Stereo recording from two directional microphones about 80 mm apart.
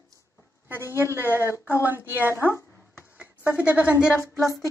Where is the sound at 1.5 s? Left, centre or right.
Left.